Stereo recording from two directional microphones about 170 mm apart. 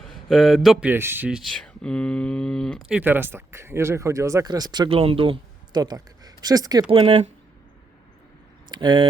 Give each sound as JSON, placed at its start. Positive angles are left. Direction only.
{"t": 0.1, "sound": "a man's voice", "side_deg": 0}
{"t": 0.9, "sound": "speech", "side_deg": -15}
{"t": 3.0, "sound": "speech", "side_deg": -10}
{"t": 6.9, "sound": "speech", "side_deg": -35}
{"t": 8.7, "sound": "speech", "side_deg": -30}